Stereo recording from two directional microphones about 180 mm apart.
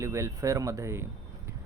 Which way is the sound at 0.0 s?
15° right (ahead or behind).